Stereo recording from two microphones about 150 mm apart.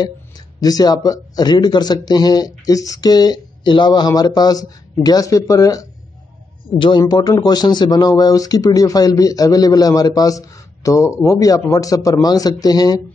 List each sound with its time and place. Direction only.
0.6 s a man's voice: 25° left (ahead or behind)